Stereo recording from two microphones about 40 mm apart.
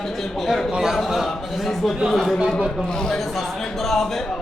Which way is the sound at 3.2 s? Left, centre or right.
Centre.